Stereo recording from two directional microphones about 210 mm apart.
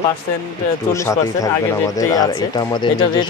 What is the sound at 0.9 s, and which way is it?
Speech, 15° left (ahead or behind).